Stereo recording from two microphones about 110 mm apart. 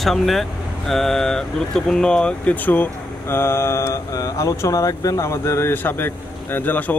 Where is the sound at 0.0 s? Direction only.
Centre (ahead or behind).